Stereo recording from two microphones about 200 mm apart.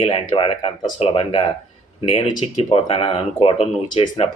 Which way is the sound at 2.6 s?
25° left (ahead or behind).